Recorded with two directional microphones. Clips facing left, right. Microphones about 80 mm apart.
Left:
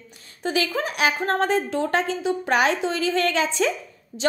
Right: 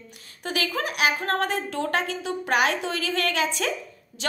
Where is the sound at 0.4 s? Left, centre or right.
Left.